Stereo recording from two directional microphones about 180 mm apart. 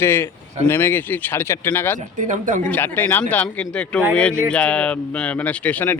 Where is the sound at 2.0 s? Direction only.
45° right (ahead or behind).